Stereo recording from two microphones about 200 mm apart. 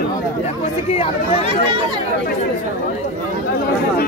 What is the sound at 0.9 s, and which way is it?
Speech, 30° left (ahead or behind).